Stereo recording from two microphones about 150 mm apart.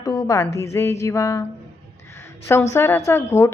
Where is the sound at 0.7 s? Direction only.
20° left (ahead or behind).